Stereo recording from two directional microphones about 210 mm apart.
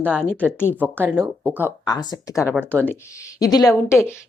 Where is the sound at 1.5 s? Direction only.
15° left (ahead or behind).